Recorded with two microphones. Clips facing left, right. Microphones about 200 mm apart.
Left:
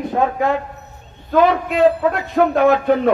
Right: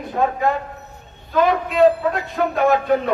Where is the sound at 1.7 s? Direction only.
50° left (ahead or behind).